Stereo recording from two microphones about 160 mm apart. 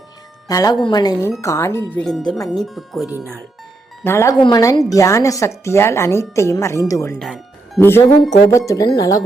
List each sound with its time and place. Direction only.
0.4 s a woman's voice: 25° left (ahead or behind); by 3.1 s centre (ahead or behind)
4.0 s a woman's voice: 15° left (ahead or behind)
7.2 s speech: centre (ahead or behind)
7.8 s a woman's voice: 15° left (ahead or behind)